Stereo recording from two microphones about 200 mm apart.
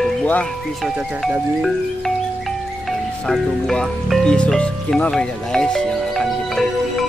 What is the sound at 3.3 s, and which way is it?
Speech, centre (ahead or behind).